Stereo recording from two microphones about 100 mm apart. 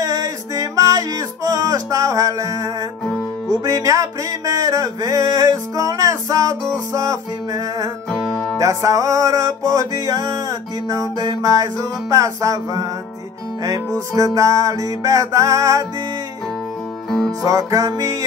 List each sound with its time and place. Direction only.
0.0 s music: 35° right (ahead or behind)
8.1 s music: 10° left (ahead or behind)
8.5 s music: 35° right (ahead or behind)
17.4 s music: 30° right (ahead or behind)